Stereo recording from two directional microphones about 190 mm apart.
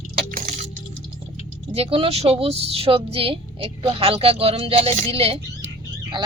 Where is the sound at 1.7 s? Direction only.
30° right (ahead or behind).